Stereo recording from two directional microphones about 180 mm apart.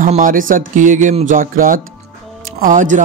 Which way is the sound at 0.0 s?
45° right (ahead or behind).